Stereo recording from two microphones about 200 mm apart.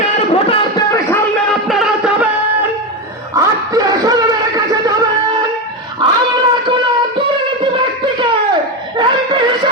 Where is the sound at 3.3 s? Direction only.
15° right (ahead or behind).